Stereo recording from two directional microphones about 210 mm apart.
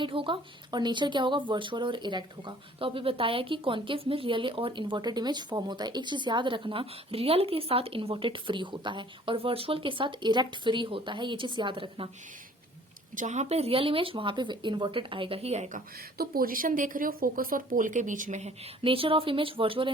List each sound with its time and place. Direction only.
0.0 s speech: 25° right (ahead or behind)
13.1 s speech: 35° right (ahead or behind)
16.1 s speech: 45° right (ahead or behind); by 19.9 s 25° right (ahead or behind)